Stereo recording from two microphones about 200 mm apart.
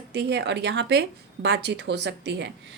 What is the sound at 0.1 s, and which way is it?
A woman's voice, 55° right (ahead or behind).